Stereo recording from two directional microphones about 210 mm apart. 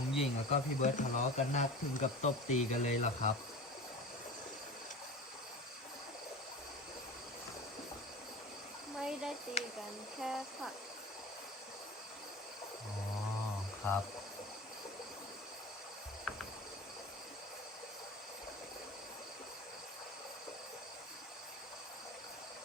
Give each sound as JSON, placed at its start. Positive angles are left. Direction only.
{"t": 0.2, "sound": "speech", "side_deg": 30}
{"t": 9.0, "sound": "a sound", "side_deg": -5}
{"t": 9.6, "sound": "speech", "side_deg": 30}
{"t": 10.2, "sound": "speech", "side_deg": 0}
{"t": 16.3, "sound": "cricket", "side_deg": 5}